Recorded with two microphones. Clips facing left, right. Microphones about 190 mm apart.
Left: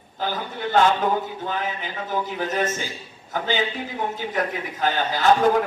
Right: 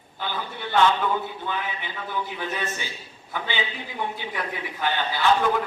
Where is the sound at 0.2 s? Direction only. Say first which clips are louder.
Left 4 dB; 40° left (ahead or behind).